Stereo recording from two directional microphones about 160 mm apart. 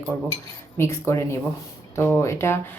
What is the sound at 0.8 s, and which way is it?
Speech, 15° left (ahead or behind).